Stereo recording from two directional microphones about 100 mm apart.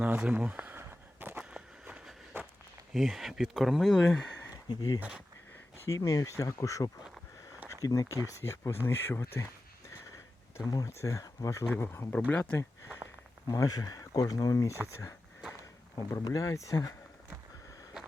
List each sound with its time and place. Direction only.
0.2 s walk: 15° right (ahead or behind)
2.9 s speech: centre (ahead or behind)
4.7 s speech: 40° left (ahead or behind)
4.9 s speech: 10° right (ahead or behind)
6.1 s speech: 35° left (ahead or behind)
10.7 s speech: 40° left (ahead or behind)
12.1 s speech: 15° left (ahead or behind)
13.5 s speech: 35° left (ahead or behind)
16.1 s speech: 35° left (ahead or behind)